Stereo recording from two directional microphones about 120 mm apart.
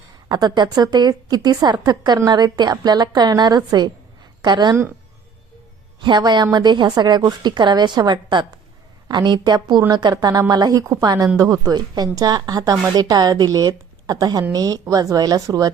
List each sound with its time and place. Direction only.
0.3 s a woman's voice: 35° right (ahead or behind)
6.0 s a woman's voice: 40° right (ahead or behind)